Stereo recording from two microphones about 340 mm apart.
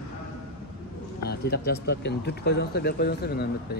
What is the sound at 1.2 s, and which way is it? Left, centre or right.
Speech, left.